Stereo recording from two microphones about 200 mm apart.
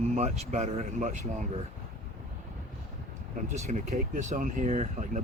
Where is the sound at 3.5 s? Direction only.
35° right (ahead or behind).